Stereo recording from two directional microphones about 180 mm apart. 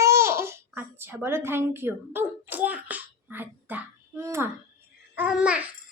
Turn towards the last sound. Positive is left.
turn(degrees=-5)  # may be behind; listen again after turning